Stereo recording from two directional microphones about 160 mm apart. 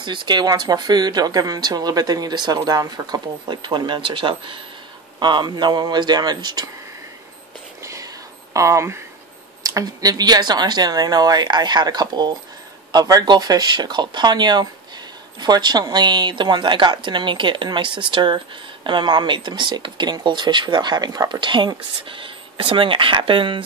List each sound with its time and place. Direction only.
0.0 s speech: 30° right (ahead or behind)
7.8 s whispering: 20° right (ahead or behind)
8.5 s speech: 20° right (ahead or behind)